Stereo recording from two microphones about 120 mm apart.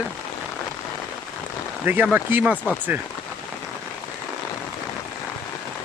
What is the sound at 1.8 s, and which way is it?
Speech, 15° right (ahead or behind).